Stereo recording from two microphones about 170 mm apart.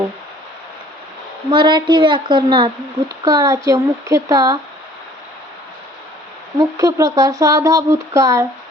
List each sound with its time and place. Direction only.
1.5 s speech: 25° right (ahead or behind)
6.6 s speech: 20° right (ahead or behind)